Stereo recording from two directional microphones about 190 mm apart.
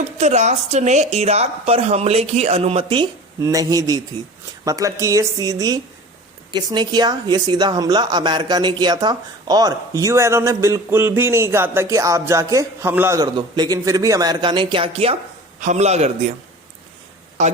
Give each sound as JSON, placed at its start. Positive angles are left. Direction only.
{"t": 0.0, "sound": "a woman's voice", "side_deg": -35}